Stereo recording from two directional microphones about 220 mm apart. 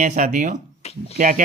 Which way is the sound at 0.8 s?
30° left (ahead or behind).